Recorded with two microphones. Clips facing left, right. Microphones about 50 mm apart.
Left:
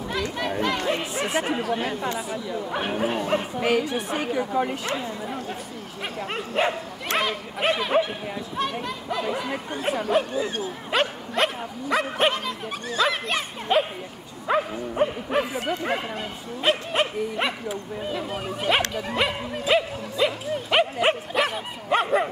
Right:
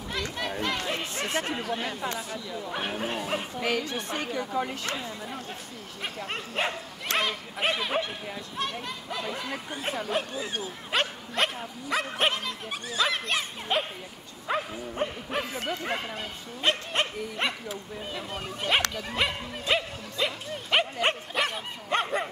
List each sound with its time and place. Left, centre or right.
0.4 s chatter: centre
2.1 s speech: centre
3.5 s speech: centre
6.3 s speech: centre
15.6 s speech: centre
15.9 s speech: centre